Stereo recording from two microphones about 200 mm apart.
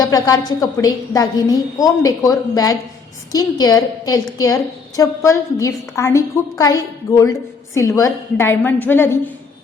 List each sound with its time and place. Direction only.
0.0 s a woman's voice: 20° left (ahead or behind)